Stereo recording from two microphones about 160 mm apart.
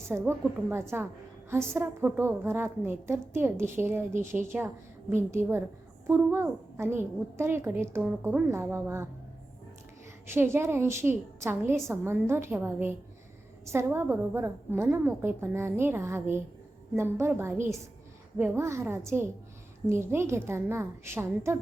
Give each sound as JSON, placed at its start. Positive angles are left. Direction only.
{"t": 0.1, "sound": "a woman's voice", "side_deg": -15}
{"t": 10.2, "sound": "a woman's voice", "side_deg": -15}